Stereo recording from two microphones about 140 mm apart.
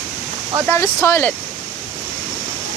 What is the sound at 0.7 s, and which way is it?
Speech, 20° left (ahead or behind).